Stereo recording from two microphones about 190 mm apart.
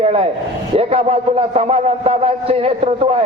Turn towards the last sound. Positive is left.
turn(degrees=-30)  # may be behind; listen again after turning